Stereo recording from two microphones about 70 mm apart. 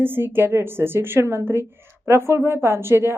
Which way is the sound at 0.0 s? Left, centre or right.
Right.